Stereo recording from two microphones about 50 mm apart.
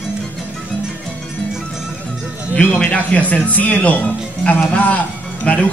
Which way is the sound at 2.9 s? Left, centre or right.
Left.